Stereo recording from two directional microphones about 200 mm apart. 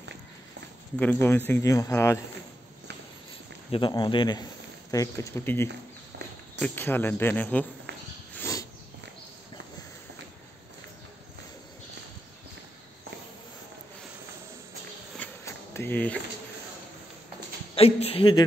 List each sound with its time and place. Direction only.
0.9 s speech: 10° left (ahead or behind)
3.7 s speech: 25° left (ahead or behind)
8.4 s a sound: 15° left (ahead or behind)
15.1 s insect: 15° left (ahead or behind)
17.7 s speech: 30° left (ahead or behind)